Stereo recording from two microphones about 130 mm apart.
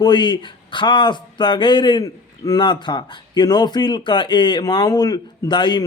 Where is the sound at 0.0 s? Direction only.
35° left (ahead or behind).